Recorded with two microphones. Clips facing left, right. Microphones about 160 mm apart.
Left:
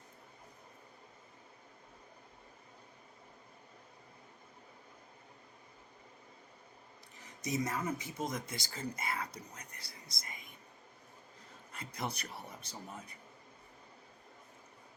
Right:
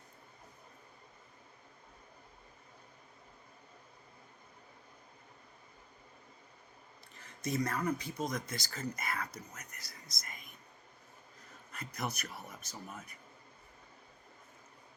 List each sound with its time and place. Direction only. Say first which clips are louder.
7.2 s a sound: right 1 dB; 20° left (ahead or behind)
7.9 s speech: right 1 dB; 20° left (ahead or behind)
11.7 s speech: right 1 dB; 25° left (ahead or behind)